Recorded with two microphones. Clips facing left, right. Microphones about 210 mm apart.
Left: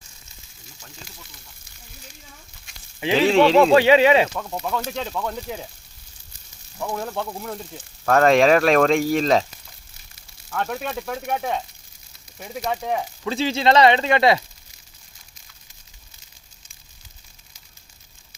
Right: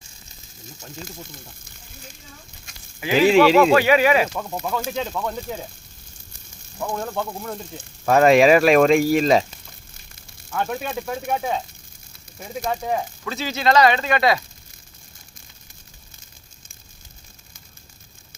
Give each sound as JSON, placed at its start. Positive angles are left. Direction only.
{"t": 1.0, "sound": "speech", "side_deg": -45}
{"t": 3.2, "sound": "speech", "side_deg": -5}
{"t": 3.6, "sound": "speech", "side_deg": 25}
{"t": 4.4, "sound": "speech", "side_deg": -5}
{"t": 6.7, "sound": "speech", "side_deg": 0}
{"t": 10.5, "sound": "speech", "side_deg": 0}
{"t": 13.2, "sound": "speech", "side_deg": 25}